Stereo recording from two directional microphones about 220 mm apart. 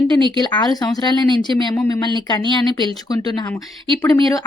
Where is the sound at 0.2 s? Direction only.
20° right (ahead or behind).